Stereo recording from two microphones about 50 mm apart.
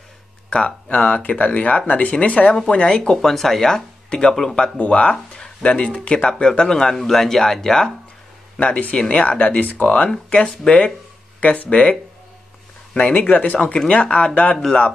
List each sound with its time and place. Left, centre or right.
0.5 s speech: left
4.7 s speech: left
6.2 s speech: centre
8.6 s speech: left
10.0 s speech: centre
11.4 s speech: left
12.9 s speech: left